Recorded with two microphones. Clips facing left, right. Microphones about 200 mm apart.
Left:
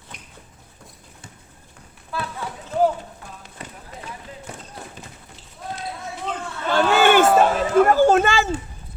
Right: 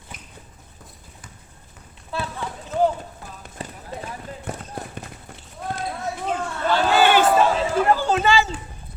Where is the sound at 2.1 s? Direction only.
25° right (ahead or behind).